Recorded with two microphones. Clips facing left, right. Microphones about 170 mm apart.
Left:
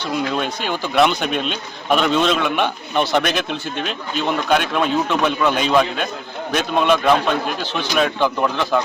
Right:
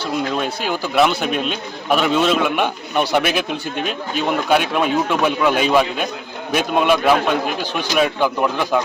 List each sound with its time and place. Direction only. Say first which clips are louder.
0.0 s a man's voice: right 1 dB; 5° right (ahead or behind)